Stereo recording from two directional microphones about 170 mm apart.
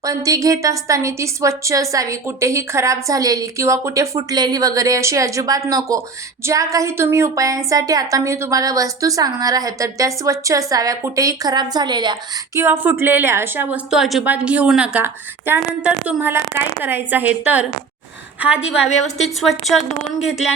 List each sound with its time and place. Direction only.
0.0 s a woman's voice: 20° right (ahead or behind)
12.5 s a woman's voice: 15° right (ahead or behind)